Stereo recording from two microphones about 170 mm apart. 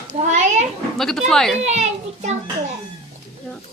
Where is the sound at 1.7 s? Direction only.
40° right (ahead or behind).